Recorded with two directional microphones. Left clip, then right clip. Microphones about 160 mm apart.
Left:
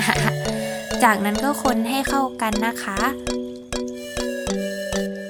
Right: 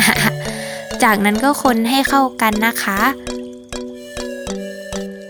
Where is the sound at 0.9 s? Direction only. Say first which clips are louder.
Right 4 dB; 25° right (ahead or behind).